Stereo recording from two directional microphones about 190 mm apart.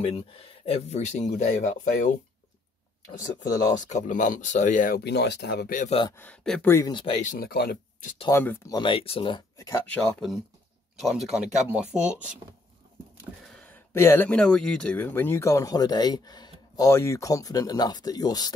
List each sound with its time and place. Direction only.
0.0 s speech: 30° left (ahead or behind)
3.7 s speech: 40° left (ahead or behind)
5.9 s speech: 25° left (ahead or behind)
6.1 s speech: 5° left (ahead or behind)
6.7 s speech: 20° left (ahead or behind)
7.2 s speech: 45° left (ahead or behind)
8.3 s speech: 15° left (ahead or behind); by 11.9 s 5° right (ahead or behind)
13.5 s speech: 10° left (ahead or behind)